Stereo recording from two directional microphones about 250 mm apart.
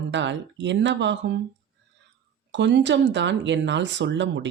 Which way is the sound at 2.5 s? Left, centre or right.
Right.